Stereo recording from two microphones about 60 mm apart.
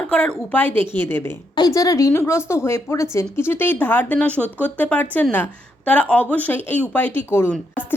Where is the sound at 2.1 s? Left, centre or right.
Left.